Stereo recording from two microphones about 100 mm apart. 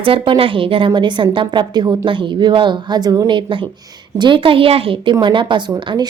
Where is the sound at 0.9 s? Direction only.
50° right (ahead or behind).